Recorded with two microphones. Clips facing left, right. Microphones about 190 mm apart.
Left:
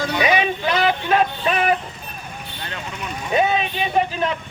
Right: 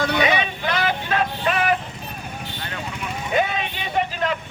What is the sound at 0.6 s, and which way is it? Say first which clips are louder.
Vehicle: left 3 dB; 25° left (ahead or behind).